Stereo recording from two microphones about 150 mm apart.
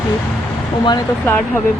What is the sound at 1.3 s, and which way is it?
Speech, 10° left (ahead or behind).